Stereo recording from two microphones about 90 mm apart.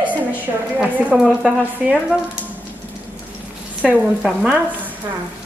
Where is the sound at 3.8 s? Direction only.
10° right (ahead or behind).